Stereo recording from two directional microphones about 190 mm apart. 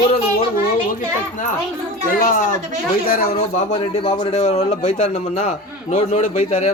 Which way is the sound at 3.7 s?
25° left (ahead or behind).